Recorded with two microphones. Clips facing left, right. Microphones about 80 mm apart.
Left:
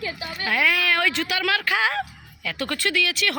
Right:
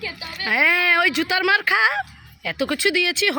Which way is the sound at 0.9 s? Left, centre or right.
Centre.